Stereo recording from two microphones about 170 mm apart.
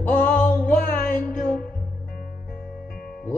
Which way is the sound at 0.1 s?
55° left (ahead or behind).